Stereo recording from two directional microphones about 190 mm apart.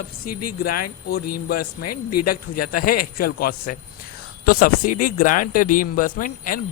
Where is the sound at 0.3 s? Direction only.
50° left (ahead or behind).